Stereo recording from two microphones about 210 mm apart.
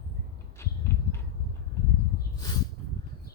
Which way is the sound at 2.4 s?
20° left (ahead or behind).